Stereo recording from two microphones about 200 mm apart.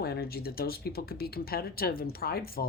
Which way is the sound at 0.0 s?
50° left (ahead or behind).